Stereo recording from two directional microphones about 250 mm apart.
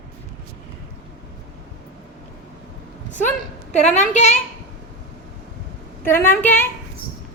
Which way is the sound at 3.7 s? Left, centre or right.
Left.